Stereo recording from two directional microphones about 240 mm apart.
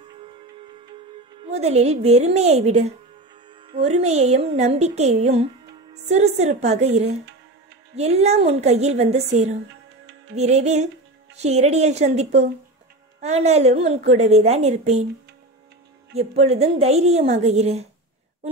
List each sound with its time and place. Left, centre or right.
1.4 s a woman's voice: right
16.2 s a woman's voice: right